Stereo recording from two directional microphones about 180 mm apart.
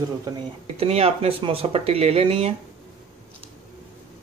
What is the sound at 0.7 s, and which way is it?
Speech, 35° right (ahead or behind).